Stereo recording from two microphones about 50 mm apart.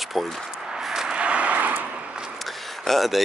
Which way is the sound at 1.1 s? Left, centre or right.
Right.